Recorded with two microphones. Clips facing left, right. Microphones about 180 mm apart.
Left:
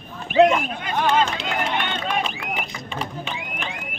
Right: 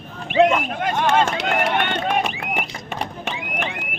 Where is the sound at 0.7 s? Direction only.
55° right (ahead or behind).